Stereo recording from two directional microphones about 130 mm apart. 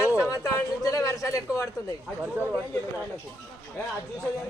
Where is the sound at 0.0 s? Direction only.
20° left (ahead or behind).